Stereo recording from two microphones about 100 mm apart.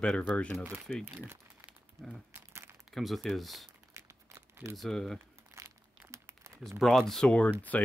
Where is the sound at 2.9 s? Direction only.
Centre (ahead or behind).